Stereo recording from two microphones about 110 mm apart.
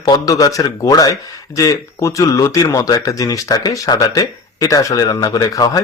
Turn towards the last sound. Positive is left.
turn(degrees=35)  # may be behind; listen again after turning